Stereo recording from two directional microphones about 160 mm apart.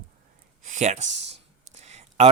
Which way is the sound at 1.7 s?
45° right (ahead or behind).